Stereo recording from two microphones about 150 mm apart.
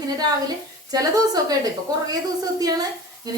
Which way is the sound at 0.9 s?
25° right (ahead or behind).